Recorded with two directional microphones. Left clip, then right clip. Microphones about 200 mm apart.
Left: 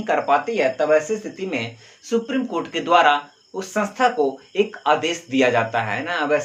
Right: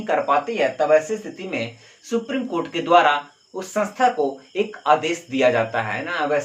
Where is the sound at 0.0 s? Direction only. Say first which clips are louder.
Left 1 dB; 30° left (ahead or behind).